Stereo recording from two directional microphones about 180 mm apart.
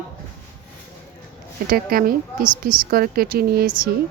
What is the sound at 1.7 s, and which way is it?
Speech, 55° right (ahead or behind).